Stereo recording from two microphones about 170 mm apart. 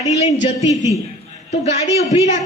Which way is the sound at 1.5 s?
40° left (ahead or behind).